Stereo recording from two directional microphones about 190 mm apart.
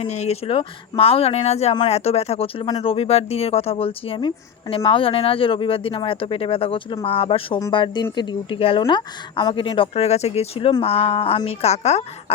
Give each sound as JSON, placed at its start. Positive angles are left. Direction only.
{"t": 0.0, "sound": "speech", "side_deg": 35}